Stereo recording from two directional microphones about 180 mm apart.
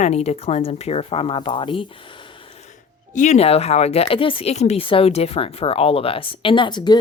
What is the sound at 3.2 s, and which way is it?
Speech, 35° left (ahead or behind).